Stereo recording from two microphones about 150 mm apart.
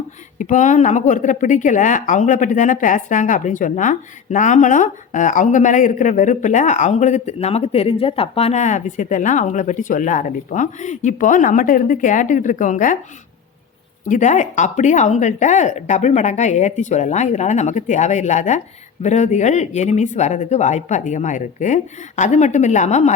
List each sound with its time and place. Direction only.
0.3 s speech: 55° left (ahead or behind)
14.0 s speech: 55° left (ahead or behind)